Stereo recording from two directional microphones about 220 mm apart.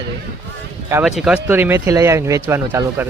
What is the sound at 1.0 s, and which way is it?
Speech, centre (ahead or behind).